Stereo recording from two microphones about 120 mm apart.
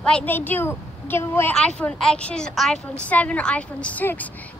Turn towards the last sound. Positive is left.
turn(degrees=15)  # may be behind; listen again after turning